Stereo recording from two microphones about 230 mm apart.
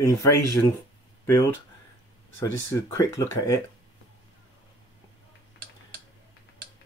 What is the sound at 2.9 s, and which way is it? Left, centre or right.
Speech, centre.